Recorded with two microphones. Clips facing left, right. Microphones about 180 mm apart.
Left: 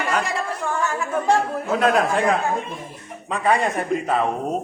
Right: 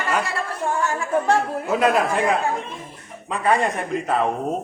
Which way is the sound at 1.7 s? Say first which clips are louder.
Even; centre (ahead or behind).